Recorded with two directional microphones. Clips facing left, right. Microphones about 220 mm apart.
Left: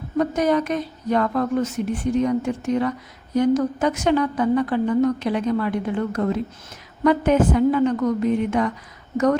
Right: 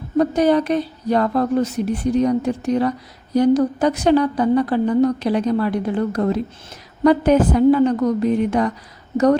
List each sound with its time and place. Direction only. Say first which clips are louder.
0.2 s a woman's voice: right 4 dB; 30° right (ahead or behind)